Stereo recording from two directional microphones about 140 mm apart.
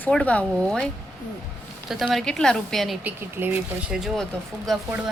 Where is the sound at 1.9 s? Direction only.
Centre (ahead or behind).